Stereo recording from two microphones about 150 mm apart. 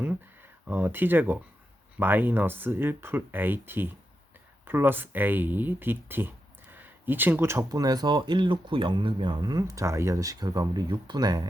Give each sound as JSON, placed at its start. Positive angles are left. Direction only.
{"t": 0.7, "sound": "speech", "side_deg": -10}